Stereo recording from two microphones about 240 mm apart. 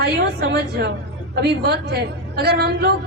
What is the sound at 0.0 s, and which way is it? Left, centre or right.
A woman's voice, right.